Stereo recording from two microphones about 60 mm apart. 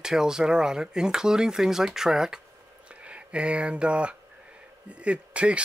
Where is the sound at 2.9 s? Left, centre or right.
Centre.